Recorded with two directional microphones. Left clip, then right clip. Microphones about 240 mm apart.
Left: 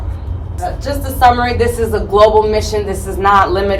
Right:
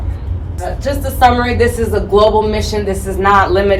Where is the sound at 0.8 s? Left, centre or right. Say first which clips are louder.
Even; centre.